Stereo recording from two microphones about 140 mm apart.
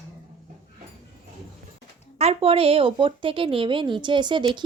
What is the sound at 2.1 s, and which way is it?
A woman's voice, 45° right (ahead or behind).